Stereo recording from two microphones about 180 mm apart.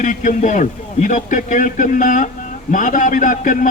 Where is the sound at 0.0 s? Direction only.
45° left (ahead or behind).